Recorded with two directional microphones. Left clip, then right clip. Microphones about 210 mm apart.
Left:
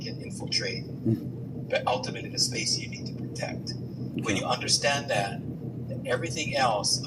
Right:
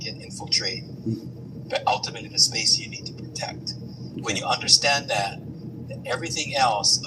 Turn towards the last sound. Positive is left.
turn(degrees=-15)  # may be behind; listen again after turning